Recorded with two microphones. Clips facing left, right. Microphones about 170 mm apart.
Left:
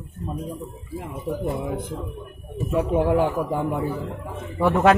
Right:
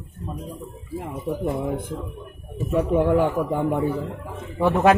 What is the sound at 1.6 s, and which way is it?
A man's voice, 50° right (ahead or behind).